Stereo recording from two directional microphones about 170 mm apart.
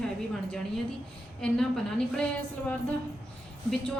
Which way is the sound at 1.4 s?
5° left (ahead or behind).